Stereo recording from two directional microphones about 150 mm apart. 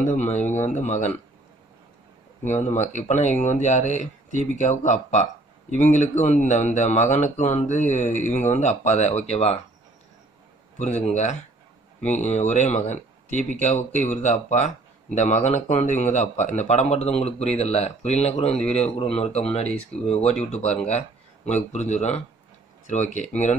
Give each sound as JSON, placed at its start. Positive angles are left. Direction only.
{"t": 0.0, "sound": "speech", "side_deg": 50}
{"t": 0.3, "sound": "speech", "side_deg": 10}
{"t": 0.6, "sound": "speech", "side_deg": 50}
{"t": 2.4, "sound": "speech", "side_deg": 50}
{"t": 10.8, "sound": "speech", "side_deg": 50}
{"t": 20.6, "sound": "speech", "side_deg": 10}
{"t": 21.7, "sound": "speech", "side_deg": 50}